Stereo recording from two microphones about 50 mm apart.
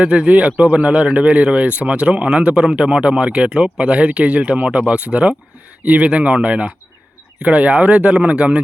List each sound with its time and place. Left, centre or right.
0.0 s a man's voice: right